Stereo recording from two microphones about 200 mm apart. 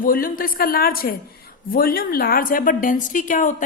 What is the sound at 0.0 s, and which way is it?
A woman's voice, 45° left (ahead or behind).